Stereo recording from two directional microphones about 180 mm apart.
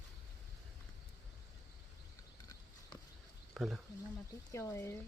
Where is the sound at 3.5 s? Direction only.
Centre (ahead or behind).